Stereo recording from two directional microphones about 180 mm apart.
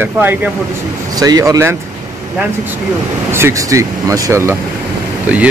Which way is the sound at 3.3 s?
15° right (ahead or behind).